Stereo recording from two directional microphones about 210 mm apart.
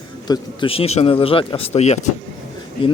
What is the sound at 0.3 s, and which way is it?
Speech, 25° left (ahead or behind).